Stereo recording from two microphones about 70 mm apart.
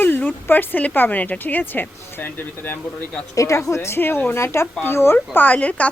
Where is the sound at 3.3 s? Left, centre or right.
Left; by 5.9 s centre.